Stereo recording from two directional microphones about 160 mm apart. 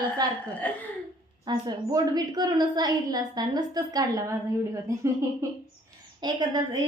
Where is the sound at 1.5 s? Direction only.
25° right (ahead or behind).